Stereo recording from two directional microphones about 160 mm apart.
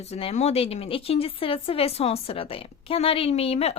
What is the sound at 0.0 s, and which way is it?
Speech, 40° left (ahead or behind).